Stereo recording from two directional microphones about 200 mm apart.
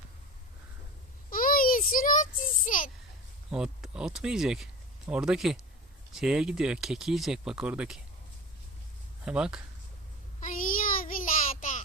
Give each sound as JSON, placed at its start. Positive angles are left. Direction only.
{"t": 1.3, "sound": "a sound", "side_deg": 45}
{"t": 3.5, "sound": "speech", "side_deg": -5}
{"t": 9.2, "sound": "speech", "side_deg": -5}
{"t": 10.4, "sound": "child singing", "side_deg": 45}